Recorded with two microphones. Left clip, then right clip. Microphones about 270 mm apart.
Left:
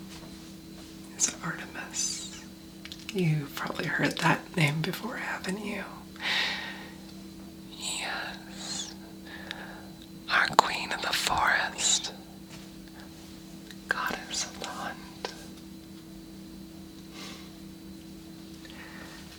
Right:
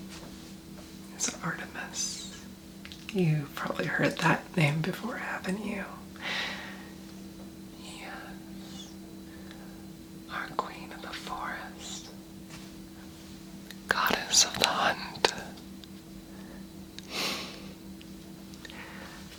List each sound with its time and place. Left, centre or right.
1.2 s speech: centre
3.1 s speech: centre
7.8 s whispering: left
10.2 s whispering: left
13.8 s whispering: centre
14.3 s whispering: right